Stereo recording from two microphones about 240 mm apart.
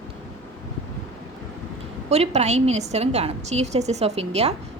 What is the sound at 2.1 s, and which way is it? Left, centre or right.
A woman's voice, right.